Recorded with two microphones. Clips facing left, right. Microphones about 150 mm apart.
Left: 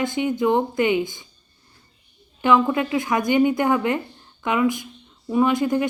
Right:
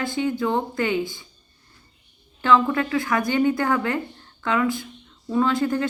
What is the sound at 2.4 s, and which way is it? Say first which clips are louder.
A woman's voice: left 1 dB; 15° left (ahead or behind).